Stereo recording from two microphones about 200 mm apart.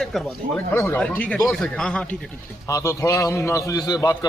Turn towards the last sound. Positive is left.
turn(degrees=20)  # may be behind; listen again after turning